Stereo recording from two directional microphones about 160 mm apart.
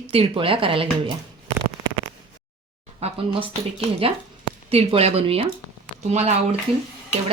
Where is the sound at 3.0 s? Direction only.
40° right (ahead or behind).